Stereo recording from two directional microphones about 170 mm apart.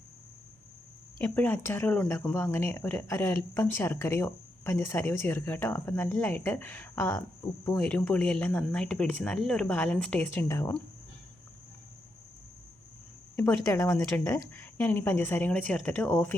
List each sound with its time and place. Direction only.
1.2 s speech: 10° left (ahead or behind)
13.3 s speech: 15° left (ahead or behind)